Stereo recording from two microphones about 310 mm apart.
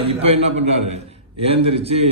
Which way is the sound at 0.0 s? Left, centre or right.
Centre.